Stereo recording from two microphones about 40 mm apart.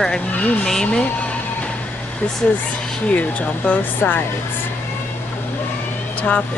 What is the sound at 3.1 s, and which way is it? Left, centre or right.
Speech, left.